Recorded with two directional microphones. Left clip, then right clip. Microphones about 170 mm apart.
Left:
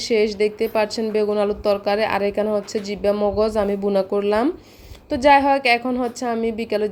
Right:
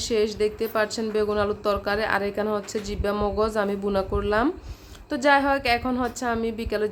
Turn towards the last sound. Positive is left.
turn(degrees=15)  # may be behind; listen again after turning